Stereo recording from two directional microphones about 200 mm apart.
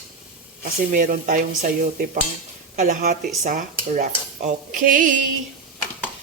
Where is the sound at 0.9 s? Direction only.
40° right (ahead or behind).